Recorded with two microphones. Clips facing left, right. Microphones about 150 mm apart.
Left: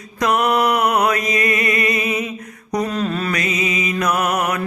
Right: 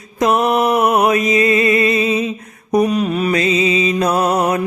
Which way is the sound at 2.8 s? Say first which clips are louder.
Right 4 dB; 15° right (ahead or behind).